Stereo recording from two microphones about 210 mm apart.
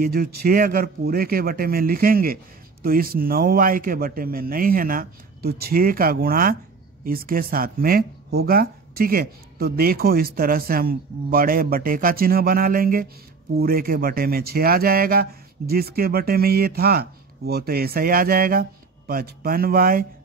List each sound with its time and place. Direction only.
0.0 s speech: 45° right (ahead or behind)